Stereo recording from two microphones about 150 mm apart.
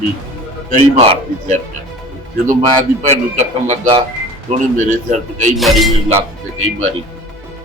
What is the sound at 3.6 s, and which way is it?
Speech, 50° right (ahead or behind).